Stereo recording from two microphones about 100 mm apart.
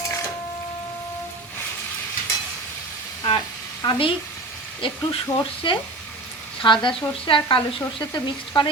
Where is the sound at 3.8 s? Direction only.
60° left (ahead or behind).